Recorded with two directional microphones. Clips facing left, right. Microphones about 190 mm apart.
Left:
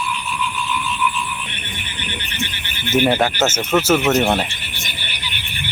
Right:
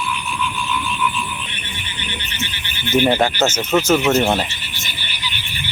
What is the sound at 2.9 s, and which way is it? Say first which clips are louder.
Speech: right 1 dB; 5° left (ahead or behind).